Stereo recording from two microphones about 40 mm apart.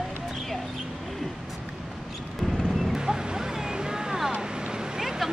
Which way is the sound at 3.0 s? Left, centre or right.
Centre.